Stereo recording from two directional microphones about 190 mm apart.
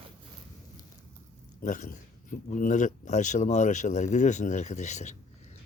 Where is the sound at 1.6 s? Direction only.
40° left (ahead or behind).